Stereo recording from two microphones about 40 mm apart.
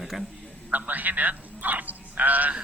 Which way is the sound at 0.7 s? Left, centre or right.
Right.